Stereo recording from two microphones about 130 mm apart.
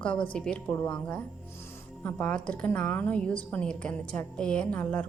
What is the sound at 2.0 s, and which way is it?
A woman's voice, 10° left (ahead or behind).